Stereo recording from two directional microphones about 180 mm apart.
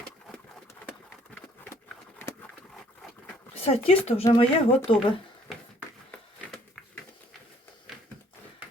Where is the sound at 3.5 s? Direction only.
35° left (ahead or behind).